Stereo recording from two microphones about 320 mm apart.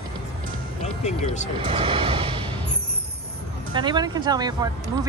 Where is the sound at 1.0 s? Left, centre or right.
Left.